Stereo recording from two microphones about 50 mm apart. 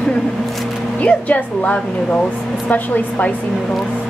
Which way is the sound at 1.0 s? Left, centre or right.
Left.